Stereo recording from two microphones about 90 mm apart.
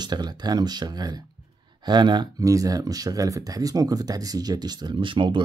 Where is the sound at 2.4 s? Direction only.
40° right (ahead or behind).